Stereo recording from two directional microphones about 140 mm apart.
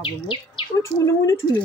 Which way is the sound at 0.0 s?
40° left (ahead or behind).